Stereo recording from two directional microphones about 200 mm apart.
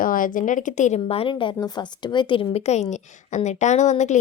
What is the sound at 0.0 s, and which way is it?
A woman's voice, 45° left (ahead or behind).